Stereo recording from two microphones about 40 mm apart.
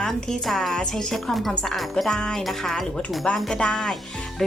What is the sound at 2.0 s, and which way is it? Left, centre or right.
A woman's voice, centre.